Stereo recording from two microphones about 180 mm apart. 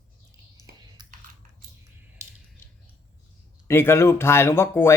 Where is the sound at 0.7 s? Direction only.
60° right (ahead or behind).